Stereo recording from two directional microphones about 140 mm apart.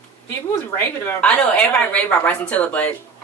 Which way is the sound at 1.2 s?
10° left (ahead or behind).